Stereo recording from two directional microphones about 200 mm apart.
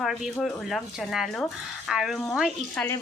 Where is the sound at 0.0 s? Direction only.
Centre (ahead or behind).